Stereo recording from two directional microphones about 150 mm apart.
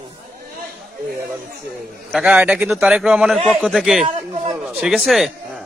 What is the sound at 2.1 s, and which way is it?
A man's voice, 5° right (ahead or behind).